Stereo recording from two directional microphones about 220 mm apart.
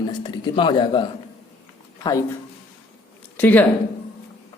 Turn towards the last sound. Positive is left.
turn(degrees=5)  # may be behind; listen again after turning